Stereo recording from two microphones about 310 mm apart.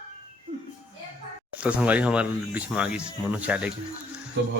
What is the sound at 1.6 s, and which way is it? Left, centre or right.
Speech, centre.